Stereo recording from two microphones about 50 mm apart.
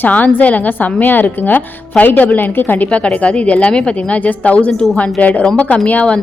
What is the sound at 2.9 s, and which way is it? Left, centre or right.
Speech, left.